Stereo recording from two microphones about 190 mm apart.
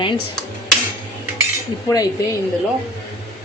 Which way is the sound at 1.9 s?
20° left (ahead or behind).